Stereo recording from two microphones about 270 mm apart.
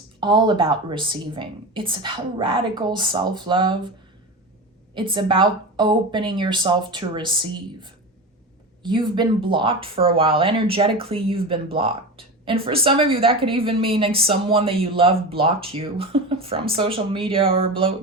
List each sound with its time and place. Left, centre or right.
0.2 s a woman's voice: centre
4.9 s a woman's voice: centre